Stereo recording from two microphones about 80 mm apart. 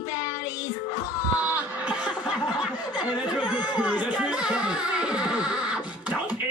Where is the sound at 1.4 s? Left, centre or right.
Centre.